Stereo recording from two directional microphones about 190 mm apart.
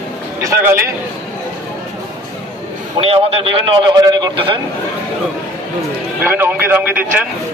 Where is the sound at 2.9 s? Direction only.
30° right (ahead or behind).